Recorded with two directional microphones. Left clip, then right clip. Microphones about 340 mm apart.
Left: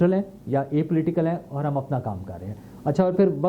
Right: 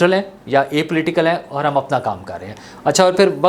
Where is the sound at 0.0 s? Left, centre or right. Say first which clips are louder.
Right 8 dB; centre.